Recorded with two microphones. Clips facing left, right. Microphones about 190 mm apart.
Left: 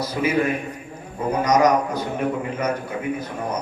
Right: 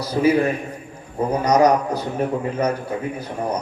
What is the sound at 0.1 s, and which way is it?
A man's voice, 35° right (ahead or behind).